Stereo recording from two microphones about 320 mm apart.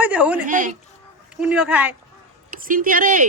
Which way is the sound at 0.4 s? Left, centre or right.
Right.